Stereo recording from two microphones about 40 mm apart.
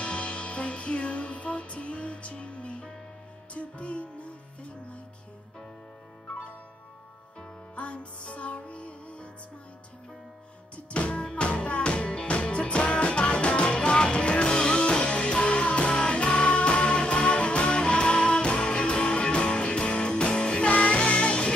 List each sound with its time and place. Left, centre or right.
0.0 s music: left
7.7 s music: left
10.9 s music: left